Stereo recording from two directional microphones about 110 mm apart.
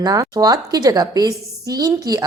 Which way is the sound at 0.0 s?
35° right (ahead or behind).